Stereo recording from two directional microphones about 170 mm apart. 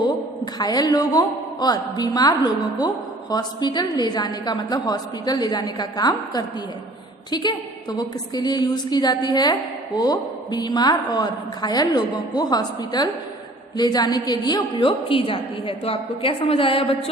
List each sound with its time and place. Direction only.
0.6 s a woman's voice: 20° left (ahead or behind)